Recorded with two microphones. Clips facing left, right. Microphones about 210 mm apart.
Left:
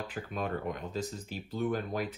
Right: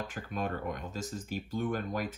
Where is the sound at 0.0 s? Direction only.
45° right (ahead or behind).